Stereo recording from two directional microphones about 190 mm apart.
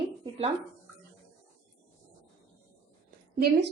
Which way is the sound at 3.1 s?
55° right (ahead or behind).